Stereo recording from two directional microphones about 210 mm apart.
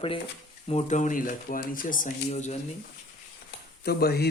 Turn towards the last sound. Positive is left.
turn(degrees=50)  # may be behind; listen again after turning